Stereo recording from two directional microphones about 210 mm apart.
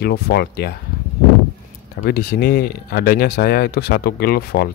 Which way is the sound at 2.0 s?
45° left (ahead or behind).